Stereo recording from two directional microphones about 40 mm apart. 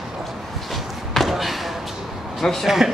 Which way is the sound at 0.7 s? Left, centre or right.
Centre.